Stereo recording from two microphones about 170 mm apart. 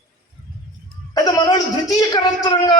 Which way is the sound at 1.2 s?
20° left (ahead or behind).